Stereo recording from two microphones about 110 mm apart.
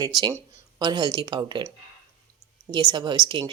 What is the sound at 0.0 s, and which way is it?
Speech, 35° right (ahead or behind).